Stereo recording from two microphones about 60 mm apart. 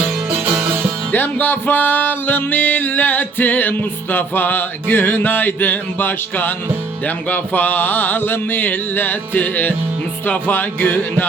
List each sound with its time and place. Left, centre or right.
1.1 s music: left